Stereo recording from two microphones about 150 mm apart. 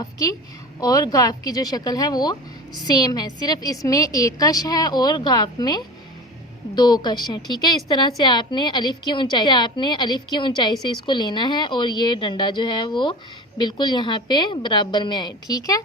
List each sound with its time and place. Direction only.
0.0 s a woman's voice: 25° left (ahead or behind)